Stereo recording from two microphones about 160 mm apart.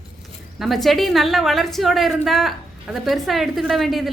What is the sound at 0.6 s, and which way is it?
A woman's voice, centre (ahead or behind).